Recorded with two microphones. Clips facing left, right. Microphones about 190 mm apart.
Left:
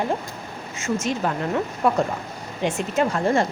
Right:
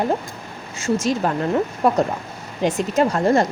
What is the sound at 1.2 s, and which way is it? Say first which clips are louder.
Speech: right 4 dB; 40° right (ahead or behind).